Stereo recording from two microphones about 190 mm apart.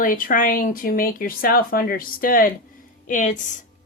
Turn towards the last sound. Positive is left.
turn(degrees=40)  # may be behind; listen again after turning